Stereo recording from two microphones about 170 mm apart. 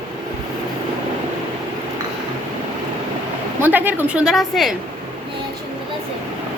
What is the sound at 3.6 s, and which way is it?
A woman's voice, 10° right (ahead or behind).